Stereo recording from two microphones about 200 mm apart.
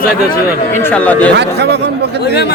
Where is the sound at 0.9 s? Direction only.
10° left (ahead or behind).